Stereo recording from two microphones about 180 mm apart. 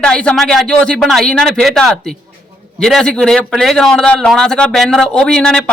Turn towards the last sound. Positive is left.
turn(degrees=5)  # may be behind; listen again after turning